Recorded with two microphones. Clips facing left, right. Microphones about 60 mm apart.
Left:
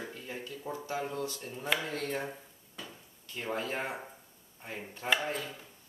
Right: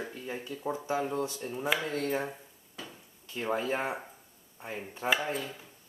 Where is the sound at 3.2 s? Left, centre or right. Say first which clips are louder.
Right 4 dB; centre.